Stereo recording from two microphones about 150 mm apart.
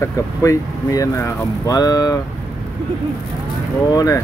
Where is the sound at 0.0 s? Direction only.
20° left (ahead or behind).